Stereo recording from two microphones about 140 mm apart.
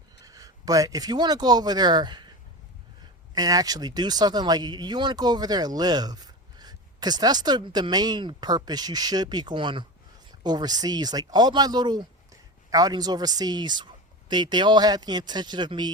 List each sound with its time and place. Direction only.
0.2 s speech: 25° right (ahead or behind)
3.3 s speech: 25° right (ahead or behind)